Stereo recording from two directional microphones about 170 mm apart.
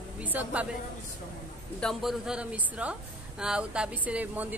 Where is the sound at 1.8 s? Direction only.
Centre (ahead or behind).